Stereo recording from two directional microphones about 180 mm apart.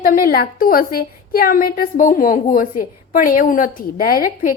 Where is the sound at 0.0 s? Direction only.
55° left (ahead or behind).